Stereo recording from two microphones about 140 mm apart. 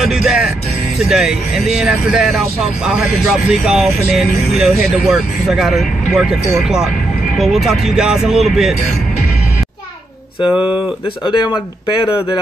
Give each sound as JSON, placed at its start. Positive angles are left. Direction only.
{"t": 0.0, "sound": "music", "side_deg": -5}
{"t": 1.0, "sound": "speech", "side_deg": -5}
{"t": 11.2, "sound": "speech", "side_deg": 35}